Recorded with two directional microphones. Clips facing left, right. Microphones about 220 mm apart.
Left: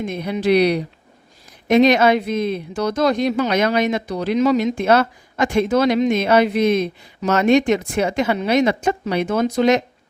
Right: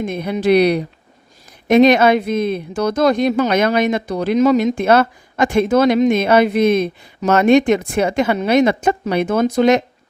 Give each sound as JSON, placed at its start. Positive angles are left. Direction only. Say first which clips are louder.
{"t": 0.0, "sound": "speech", "louder": "right 2 dB", "side_deg": -50}